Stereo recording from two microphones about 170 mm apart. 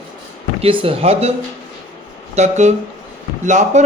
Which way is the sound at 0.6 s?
30° right (ahead or behind).